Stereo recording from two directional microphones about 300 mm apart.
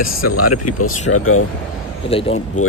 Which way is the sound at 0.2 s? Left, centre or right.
Left.